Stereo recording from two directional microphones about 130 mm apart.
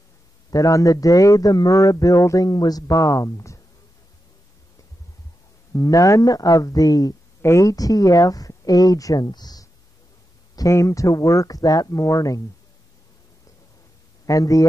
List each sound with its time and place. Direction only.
0.5 s a man's voice: 25° left (ahead or behind)
5.7 s a man's voice: 25° left (ahead or behind)
14.2 s speech: 25° left (ahead or behind)